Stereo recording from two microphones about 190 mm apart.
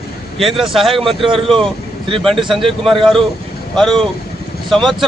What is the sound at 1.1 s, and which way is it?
Speech, 25° right (ahead or behind).